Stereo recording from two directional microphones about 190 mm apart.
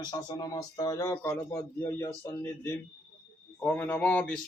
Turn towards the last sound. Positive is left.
turn(degrees=5)  # may be behind; listen again after turning